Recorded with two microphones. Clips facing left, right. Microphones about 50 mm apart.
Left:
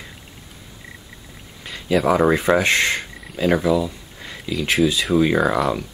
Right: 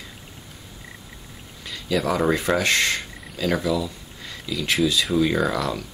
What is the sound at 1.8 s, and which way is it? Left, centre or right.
Speech, left.